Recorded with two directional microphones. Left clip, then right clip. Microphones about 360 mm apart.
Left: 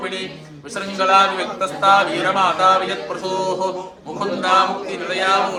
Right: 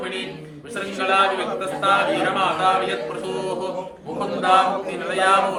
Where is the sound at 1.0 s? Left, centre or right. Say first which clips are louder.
Left 5 dB; centre.